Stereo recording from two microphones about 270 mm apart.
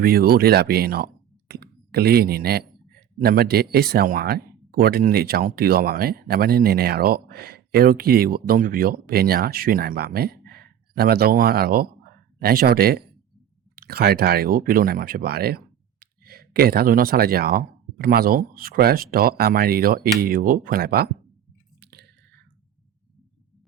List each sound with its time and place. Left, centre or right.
0.0 s speech: right
21.8 s chewing: right